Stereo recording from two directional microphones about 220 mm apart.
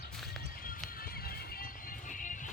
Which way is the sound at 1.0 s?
40° left (ahead or behind).